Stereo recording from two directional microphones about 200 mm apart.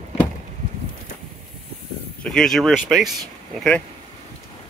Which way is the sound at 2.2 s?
Centre (ahead or behind).